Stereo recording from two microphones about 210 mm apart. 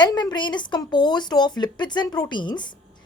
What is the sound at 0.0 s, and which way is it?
A woman's voice, 20° left (ahead or behind).